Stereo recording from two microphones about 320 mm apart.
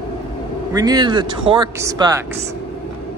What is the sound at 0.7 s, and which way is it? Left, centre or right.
Speech, centre.